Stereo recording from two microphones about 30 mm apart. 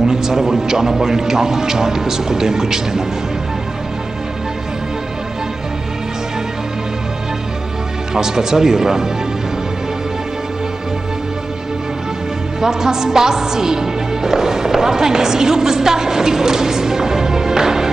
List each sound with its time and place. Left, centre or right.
0.0 s a man's voice: centre
8.1 s a man's voice: centre
12.5 s speech: centre